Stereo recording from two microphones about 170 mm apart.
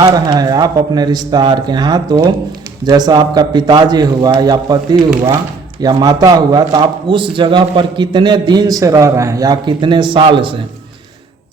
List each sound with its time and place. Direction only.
0.0 s a man's voice: 20° right (ahead or behind)